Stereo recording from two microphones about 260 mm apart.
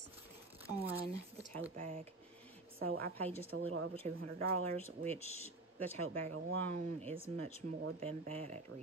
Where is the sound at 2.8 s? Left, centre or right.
Right.